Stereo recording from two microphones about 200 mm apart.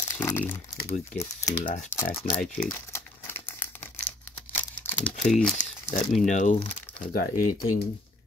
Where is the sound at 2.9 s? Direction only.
10° left (ahead or behind).